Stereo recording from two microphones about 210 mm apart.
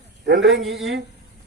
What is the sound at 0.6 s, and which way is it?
Speech, centre (ahead or behind).